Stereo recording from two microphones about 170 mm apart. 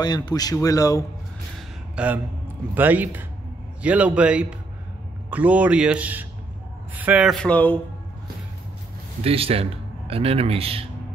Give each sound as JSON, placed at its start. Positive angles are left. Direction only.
{"t": 0.0, "sound": "speech", "side_deg": 25}
{"t": 2.0, "sound": "a man's voice", "side_deg": -10}
{"t": 9.2, "sound": "a man's voice", "side_deg": -35}